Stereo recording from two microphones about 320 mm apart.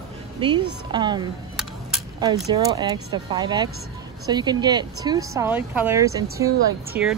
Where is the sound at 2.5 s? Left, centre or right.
Centre.